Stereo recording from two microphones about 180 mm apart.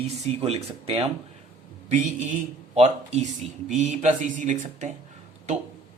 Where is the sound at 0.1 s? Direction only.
35° right (ahead or behind).